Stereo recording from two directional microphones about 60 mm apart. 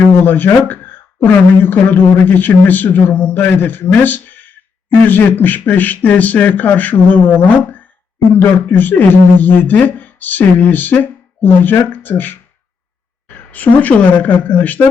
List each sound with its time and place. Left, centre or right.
0.2 s a man's voice: left